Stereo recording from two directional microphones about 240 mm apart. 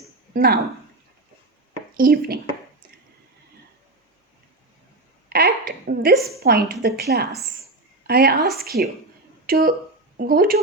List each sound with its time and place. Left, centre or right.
0.3 s a woman's voice: right
2.0 s a woman's voice: right
5.3 s a woman's voice: right